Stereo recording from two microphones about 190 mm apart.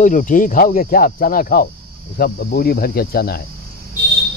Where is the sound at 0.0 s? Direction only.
45° left (ahead or behind).